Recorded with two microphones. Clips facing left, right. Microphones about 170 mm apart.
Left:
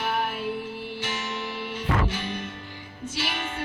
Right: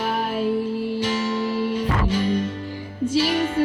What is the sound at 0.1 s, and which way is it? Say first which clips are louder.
Music: right 6 dB; 30° right (ahead or behind).